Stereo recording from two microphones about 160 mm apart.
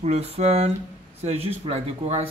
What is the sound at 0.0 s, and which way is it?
Speech, 40° right (ahead or behind).